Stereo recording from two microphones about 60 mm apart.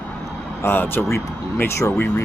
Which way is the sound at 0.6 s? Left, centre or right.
Left.